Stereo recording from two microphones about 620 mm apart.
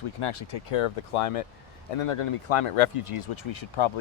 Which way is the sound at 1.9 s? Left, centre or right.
Left.